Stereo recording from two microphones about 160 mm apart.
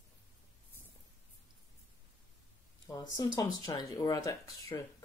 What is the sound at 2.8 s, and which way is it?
Speech, 20° left (ahead or behind).